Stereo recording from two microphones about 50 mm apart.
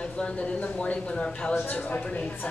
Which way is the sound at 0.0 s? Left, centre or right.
Left.